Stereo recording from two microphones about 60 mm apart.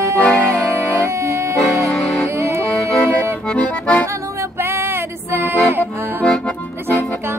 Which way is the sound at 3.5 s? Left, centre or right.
Left.